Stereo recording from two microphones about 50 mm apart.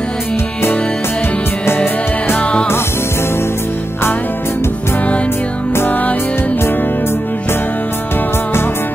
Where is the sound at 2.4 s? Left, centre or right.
Left.